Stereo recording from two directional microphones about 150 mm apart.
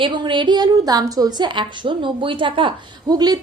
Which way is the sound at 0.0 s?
30° right (ahead or behind).